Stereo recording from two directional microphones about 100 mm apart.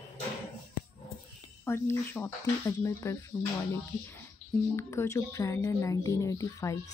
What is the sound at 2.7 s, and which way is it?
Speech, 40° left (ahead or behind).